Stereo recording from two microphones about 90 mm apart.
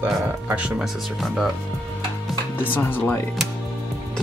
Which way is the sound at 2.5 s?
20° left (ahead or behind).